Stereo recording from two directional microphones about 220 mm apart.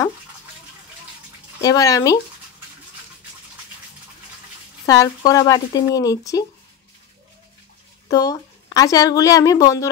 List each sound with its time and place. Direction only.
1.6 s a woman's voice: 15° left (ahead or behind)
4.8 s a woman's voice: 15° left (ahead or behind)
8.1 s a woman's voice: 15° left (ahead or behind)